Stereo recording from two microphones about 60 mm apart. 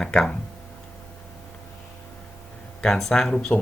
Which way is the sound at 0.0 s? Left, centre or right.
Centre.